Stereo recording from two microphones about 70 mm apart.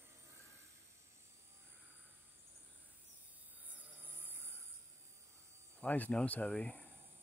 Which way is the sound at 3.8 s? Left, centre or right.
Right.